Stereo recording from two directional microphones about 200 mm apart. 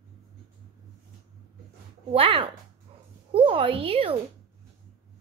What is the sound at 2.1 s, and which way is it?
A woman's voice, 25° right (ahead or behind).